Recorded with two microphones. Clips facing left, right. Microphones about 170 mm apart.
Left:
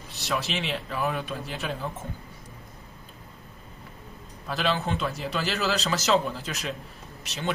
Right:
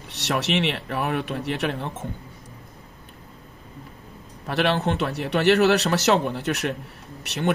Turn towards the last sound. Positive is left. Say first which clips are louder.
# right 7 dB
turn(degrees=-65)  # may be behind; listen again after turning